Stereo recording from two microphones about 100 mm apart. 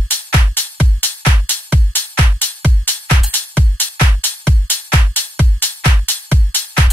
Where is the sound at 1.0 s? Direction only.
20° left (ahead or behind).